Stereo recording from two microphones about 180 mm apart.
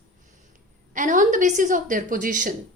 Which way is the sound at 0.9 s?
45° right (ahead or behind).